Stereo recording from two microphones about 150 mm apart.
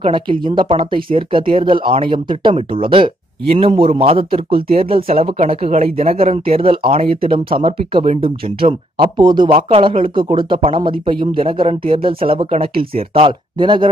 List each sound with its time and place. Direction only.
0.0 s speech: 35° right (ahead or behind)